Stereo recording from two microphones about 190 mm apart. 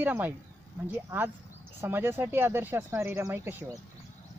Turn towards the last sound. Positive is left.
turn(degrees=-10)  # may be behind; listen again after turning